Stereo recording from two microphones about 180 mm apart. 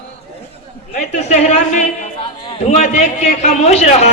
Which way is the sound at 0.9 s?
40° left (ahead or behind).